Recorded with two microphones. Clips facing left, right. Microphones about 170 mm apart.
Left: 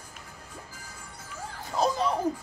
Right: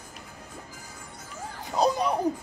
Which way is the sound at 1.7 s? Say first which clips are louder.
Right 2 dB; 15° right (ahead or behind).